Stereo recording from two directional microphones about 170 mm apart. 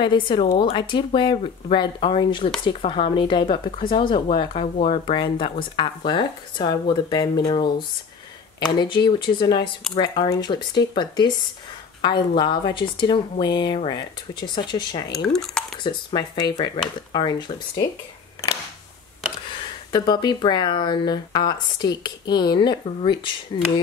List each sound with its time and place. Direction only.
0.0 s speech: 25° left (ahead or behind)
15.1 s speech: 5° left (ahead or behind)
15.8 s speech: 25° left (ahead or behind)
19.5 s speech: 25° left (ahead or behind)